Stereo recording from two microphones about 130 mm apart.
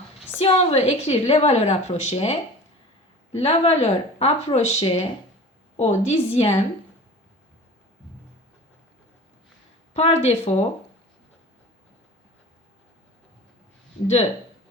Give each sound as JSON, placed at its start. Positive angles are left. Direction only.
{"t": 0.3, "sound": "a woman's voice", "side_deg": 50}
{"t": 3.3, "sound": "a woman's voice", "side_deg": 50}
{"t": 9.9, "sound": "a woman's voice", "side_deg": 55}